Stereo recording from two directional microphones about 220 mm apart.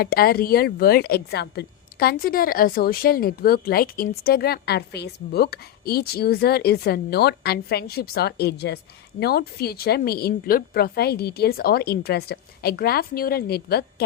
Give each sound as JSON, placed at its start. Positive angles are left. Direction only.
{"t": 0.0, "sound": "a woman's voice", "side_deg": 45}